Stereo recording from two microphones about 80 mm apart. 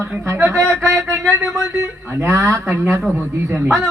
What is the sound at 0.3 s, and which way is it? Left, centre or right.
Speech, right.